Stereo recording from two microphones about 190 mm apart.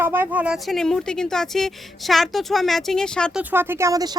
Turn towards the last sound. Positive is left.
turn(degrees=-20)  # may be behind; listen again after turning